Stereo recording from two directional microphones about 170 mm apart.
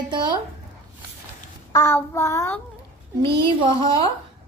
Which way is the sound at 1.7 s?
15° left (ahead or behind).